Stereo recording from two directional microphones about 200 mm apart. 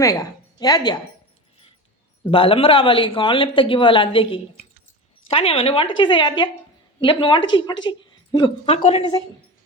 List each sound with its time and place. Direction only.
0.0 s a woman's voice: 20° left (ahead or behind)
2.3 s a man's voice: 25° left (ahead or behind)